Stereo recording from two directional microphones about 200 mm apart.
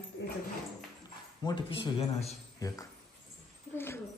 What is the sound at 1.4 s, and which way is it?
Speech, 25° left (ahead or behind).